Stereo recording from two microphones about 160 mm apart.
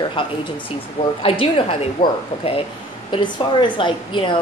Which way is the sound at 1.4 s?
35° left (ahead or behind).